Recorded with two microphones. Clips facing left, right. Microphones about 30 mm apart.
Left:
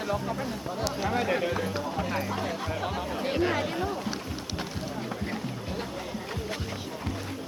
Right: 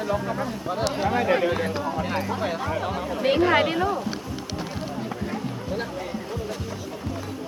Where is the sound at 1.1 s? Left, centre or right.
Right.